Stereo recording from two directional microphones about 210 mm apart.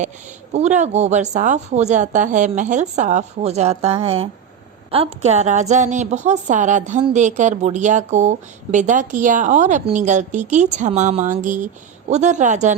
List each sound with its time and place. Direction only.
0.5 s a woman's voice: 35° right (ahead or behind)